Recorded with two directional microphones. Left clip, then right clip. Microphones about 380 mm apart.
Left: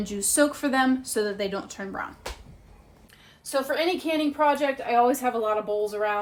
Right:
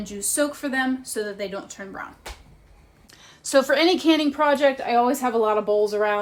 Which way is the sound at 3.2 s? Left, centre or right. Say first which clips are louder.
Right 8 dB; centre.